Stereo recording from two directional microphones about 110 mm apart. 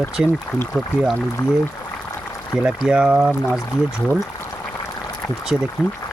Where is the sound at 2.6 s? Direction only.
10° right (ahead or behind).